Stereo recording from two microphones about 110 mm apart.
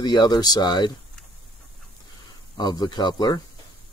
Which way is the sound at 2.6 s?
40° left (ahead or behind).